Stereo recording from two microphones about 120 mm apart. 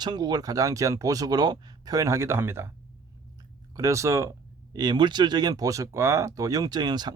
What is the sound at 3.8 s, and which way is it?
Speech, 25° right (ahead or behind).